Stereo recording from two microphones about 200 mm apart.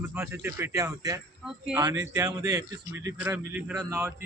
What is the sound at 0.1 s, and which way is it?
A man's voice, 10° right (ahead or behind).